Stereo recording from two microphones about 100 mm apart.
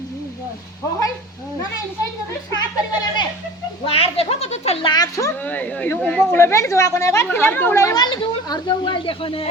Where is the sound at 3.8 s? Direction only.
80° left.